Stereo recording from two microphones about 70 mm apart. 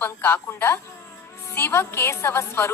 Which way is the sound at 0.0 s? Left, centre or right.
Left.